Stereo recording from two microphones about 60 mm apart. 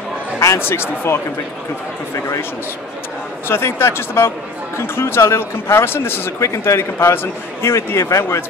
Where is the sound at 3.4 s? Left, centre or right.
Left.